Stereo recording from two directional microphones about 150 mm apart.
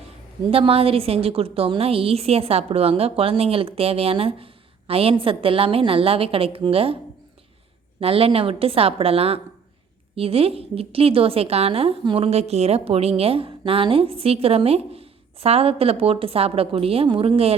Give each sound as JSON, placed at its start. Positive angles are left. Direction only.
{"t": 0.5, "sound": "a woman's voice", "side_deg": -40}
{"t": 8.0, "sound": "a woman's voice", "side_deg": -40}